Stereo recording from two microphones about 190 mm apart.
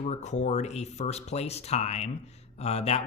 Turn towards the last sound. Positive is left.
turn(degrees=35)  # may be behind; listen again after turning